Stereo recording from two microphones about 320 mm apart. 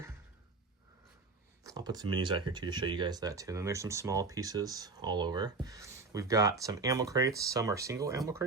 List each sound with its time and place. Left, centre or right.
1.6 s speech: centre